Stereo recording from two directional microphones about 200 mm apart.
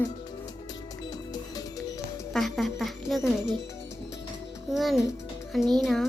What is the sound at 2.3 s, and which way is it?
Speech, centre (ahead or behind).